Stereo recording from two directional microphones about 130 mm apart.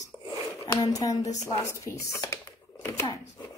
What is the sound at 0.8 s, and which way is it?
A woman's voice, 25° left (ahead or behind).